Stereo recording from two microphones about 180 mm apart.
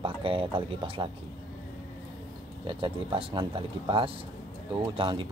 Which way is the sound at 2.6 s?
30° right (ahead or behind).